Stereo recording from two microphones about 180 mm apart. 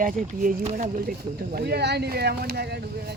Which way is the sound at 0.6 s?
35° right (ahead or behind).